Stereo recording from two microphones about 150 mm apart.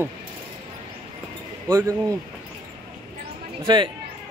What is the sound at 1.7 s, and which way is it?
Speech, 20° right (ahead or behind).